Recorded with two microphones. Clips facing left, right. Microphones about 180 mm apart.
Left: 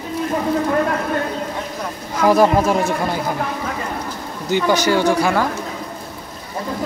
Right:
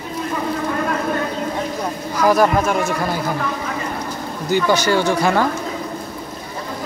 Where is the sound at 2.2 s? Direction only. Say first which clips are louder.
Left 1 dB; 25° left (ahead or behind).